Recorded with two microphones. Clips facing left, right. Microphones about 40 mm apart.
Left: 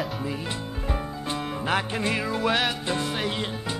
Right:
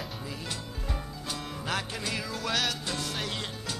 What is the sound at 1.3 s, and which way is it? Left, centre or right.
Music, left.